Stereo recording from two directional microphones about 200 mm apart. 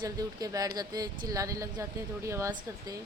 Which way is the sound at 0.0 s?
20° right (ahead or behind).